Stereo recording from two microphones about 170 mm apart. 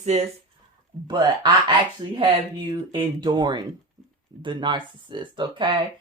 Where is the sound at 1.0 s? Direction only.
25° right (ahead or behind).